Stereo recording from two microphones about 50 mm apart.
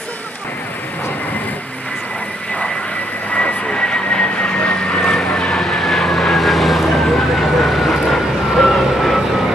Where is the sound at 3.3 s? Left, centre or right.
Centre.